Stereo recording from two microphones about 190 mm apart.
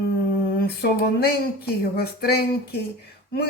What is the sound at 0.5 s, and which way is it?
Speech, 55° left (ahead or behind).